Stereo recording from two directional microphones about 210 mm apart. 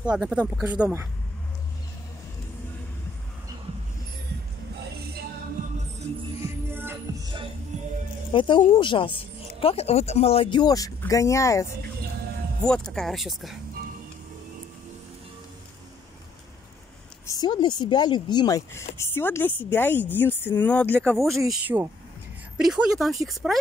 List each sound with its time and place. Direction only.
0.0 s speech: 5° right (ahead or behind)
5.6 s music: 40° right (ahead or behind)
6.4 s music: 10° right (ahead or behind)
7.7 s music: 35° right (ahead or behind)
8.3 s speech: 25° left (ahead or behind)
12.6 s speech: 5° left (ahead or behind)
17.3 s a woman's voice: 20° left (ahead or behind); by 23.6 s centre (ahead or behind)